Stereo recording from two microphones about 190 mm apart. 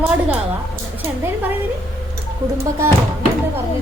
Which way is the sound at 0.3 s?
10° right (ahead or behind).